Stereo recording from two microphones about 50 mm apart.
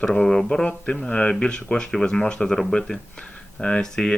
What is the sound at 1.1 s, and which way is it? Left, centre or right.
Speech, left.